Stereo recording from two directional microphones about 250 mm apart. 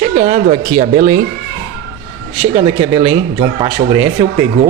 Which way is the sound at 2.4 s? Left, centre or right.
Right.